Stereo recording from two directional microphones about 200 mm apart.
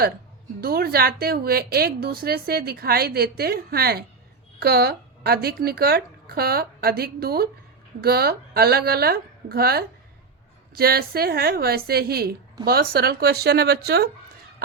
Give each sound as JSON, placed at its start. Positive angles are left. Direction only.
{"t": 0.6, "sound": "a woman's voice", "side_deg": -50}